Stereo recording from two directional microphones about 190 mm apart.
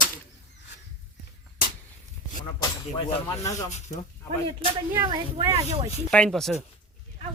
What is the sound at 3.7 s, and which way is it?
Speech, 35° left (ahead or behind).